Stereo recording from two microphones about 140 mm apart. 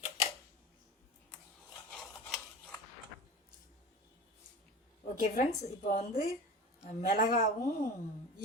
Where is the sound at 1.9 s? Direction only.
Centre (ahead or behind).